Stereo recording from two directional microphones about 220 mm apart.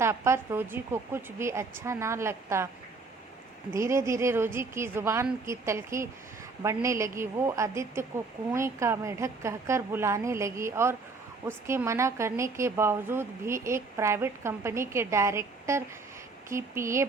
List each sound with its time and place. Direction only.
0.0 s speech: 10° right (ahead or behind)
3.7 s speech: 15° right (ahead or behind)